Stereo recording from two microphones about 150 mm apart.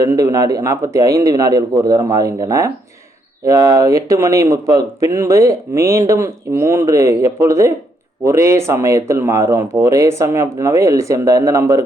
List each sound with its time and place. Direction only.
0.2 s speech: 25° right (ahead or behind)